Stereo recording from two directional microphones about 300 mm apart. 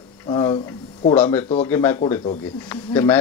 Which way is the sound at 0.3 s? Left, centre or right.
Centre.